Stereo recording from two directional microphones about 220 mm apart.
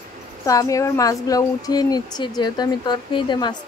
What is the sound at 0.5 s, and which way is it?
Speech, 15° left (ahead or behind).